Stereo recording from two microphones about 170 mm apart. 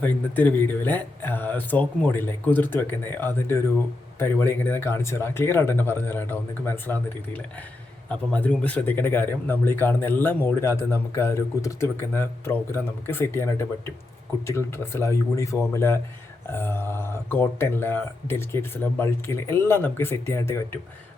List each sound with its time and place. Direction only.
0.0 s speech: 10° left (ahead or behind)